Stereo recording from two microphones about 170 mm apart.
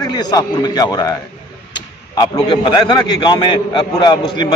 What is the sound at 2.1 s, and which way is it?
A man's voice, 25° left (ahead or behind).